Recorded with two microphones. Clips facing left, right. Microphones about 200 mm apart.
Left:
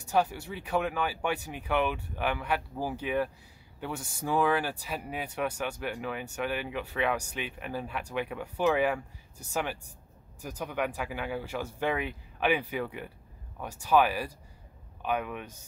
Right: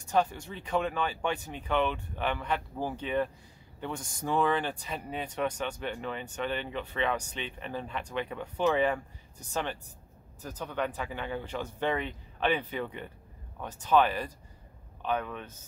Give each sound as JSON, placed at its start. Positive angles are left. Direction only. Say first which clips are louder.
{"t": 0.0, "sound": "speech", "louder": "even", "side_deg": 10}